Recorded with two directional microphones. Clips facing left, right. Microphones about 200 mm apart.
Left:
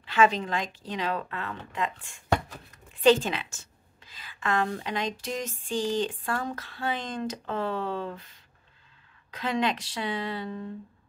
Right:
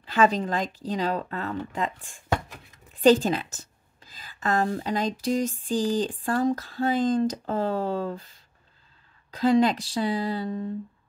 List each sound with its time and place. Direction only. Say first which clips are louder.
0.0 s a woman's voice: right 2 dB; 35° right (ahead or behind)
9.3 s a woman's voice: right 8 dB; 35° right (ahead or behind)